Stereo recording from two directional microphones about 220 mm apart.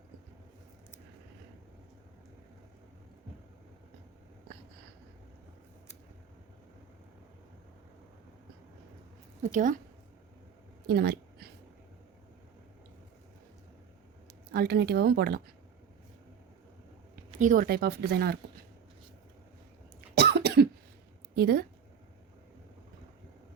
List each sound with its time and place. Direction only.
9.4 s speech: 35° right (ahead or behind)
10.8 s a sound: 45° right (ahead or behind)
14.5 s speech: 45° right (ahead or behind)
17.4 s speech: 35° right (ahead or behind)
20.1 s cough: 45° right (ahead or behind)
21.3 s speech: 45° right (ahead or behind)